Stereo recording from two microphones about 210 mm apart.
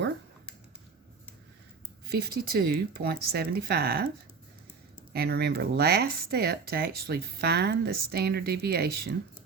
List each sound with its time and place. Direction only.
2.0 s speech: 45° right (ahead or behind)
5.1 s speech: 50° right (ahead or behind)